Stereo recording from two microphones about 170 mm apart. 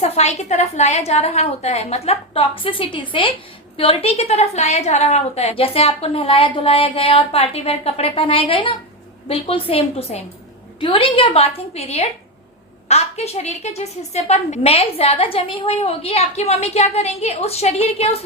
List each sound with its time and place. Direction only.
0.0 s a woman's voice: 40° left (ahead or behind)